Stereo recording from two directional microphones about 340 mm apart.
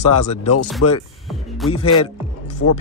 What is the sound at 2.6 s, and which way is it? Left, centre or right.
Speech, left.